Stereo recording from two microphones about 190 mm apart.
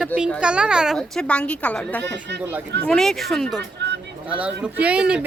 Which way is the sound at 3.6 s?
65° right (ahead or behind).